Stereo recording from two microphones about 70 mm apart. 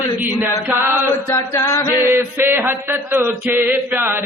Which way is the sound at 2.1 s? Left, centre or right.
Right.